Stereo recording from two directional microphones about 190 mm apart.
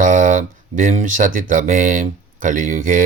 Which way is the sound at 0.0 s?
40° right (ahead or behind).